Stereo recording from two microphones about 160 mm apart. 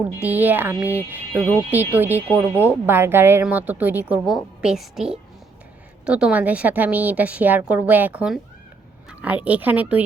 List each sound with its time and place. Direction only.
0.2 s speech: 10° right (ahead or behind)